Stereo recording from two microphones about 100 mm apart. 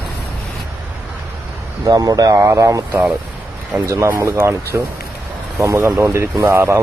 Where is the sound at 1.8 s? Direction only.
40° right (ahead or behind).